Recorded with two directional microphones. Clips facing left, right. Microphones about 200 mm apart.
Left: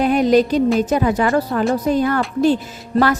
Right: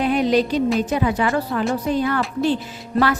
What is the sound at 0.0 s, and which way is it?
Music, 45° left (ahead or behind).